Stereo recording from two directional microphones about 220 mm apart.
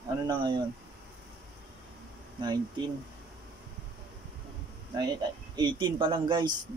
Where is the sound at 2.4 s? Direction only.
20° right (ahead or behind).